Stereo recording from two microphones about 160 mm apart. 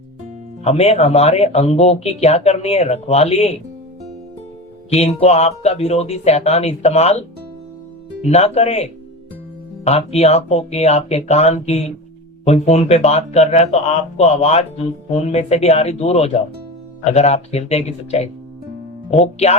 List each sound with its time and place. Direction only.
0.6 s speech: 40° left (ahead or behind)
4.9 s speech: 40° left (ahead or behind)